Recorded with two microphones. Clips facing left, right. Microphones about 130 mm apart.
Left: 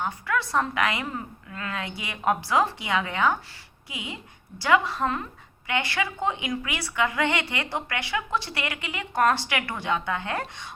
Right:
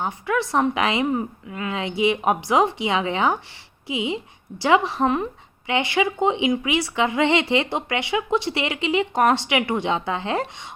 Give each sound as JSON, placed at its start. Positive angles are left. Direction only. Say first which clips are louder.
{"t": 0.0, "sound": "a woman's voice", "louder": "right 4 dB", "side_deg": -20}